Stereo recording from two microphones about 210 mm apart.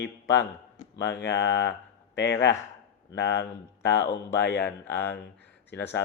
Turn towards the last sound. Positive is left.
turn(degrees=55)  # may be behind; listen again after turning